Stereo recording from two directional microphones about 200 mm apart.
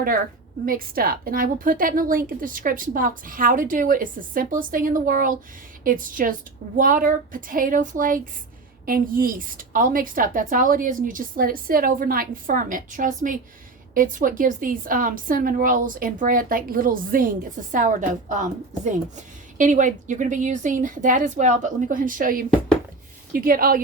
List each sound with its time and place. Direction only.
0.6 s a woman's voice: 45° right (ahead or behind)